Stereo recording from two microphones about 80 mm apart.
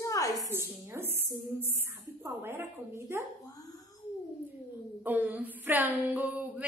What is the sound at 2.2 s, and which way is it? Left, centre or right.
A woman's voice, right.